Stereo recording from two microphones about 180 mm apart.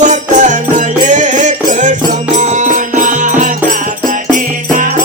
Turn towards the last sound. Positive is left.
turn(degrees=-45)  # may be behind; listen again after turning